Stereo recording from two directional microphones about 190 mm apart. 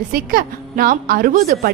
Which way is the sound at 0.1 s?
50° right (ahead or behind).